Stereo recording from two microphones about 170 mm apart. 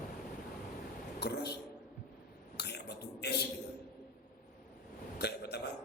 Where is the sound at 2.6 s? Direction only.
75° left (ahead or behind).